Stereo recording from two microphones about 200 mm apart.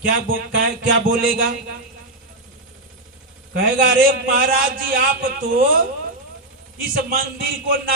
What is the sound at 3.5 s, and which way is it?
A man's voice, 50° right (ahead or behind).